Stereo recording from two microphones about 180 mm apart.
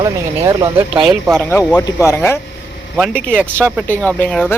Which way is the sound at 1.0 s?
Centre (ahead or behind).